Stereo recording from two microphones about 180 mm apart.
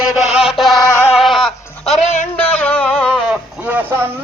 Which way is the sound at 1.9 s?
40° left (ahead or behind).